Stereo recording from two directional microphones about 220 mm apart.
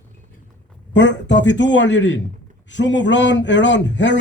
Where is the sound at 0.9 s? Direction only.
55° left (ahead or behind).